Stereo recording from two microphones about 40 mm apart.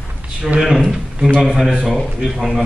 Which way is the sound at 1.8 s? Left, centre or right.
Centre.